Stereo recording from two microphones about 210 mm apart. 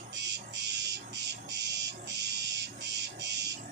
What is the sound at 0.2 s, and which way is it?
Frog, 55° right (ahead or behind).